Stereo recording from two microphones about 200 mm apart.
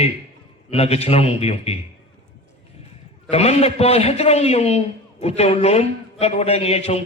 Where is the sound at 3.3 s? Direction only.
30° left (ahead or behind).